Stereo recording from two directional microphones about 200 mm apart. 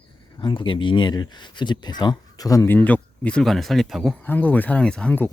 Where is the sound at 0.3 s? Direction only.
25° left (ahead or behind).